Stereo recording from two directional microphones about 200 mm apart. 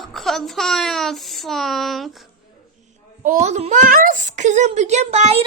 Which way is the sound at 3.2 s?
35° right (ahead or behind).